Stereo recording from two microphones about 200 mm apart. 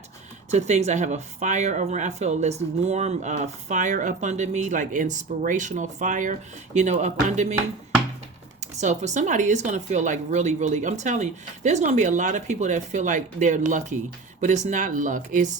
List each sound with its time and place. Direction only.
0.5 s speech: 35° right (ahead or behind)
8.6 s speech: 35° right (ahead or behind)